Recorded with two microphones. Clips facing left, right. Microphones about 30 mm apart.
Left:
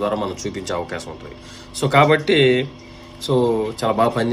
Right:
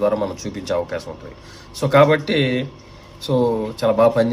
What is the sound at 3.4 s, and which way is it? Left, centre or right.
Speech, centre.